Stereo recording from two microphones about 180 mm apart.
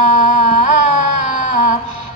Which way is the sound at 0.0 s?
40° left (ahead or behind).